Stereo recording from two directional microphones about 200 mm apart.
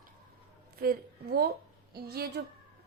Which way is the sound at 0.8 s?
50° right (ahead or behind).